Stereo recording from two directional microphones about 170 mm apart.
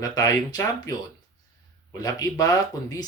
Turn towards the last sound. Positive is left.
turn(degrees=20)  # may be behind; listen again after turning